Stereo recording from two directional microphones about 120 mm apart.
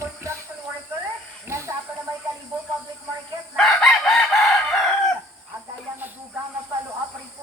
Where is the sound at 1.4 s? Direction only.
20° right (ahead or behind).